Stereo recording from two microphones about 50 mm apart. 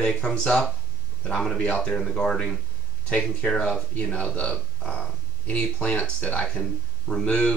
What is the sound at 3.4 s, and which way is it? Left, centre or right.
Speech, left.